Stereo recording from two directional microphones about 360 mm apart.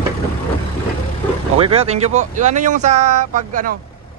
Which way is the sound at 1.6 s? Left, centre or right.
Centre.